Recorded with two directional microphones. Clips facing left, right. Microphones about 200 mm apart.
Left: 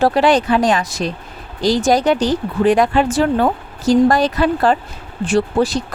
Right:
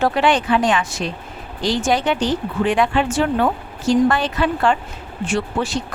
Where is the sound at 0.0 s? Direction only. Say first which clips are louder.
Left 4 dB; 35° left (ahead or behind).